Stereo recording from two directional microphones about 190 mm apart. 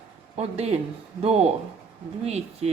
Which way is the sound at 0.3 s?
35° right (ahead or behind).